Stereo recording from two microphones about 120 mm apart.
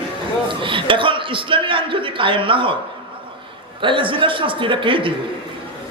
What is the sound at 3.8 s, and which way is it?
A man's voice, 45° right (ahead or behind).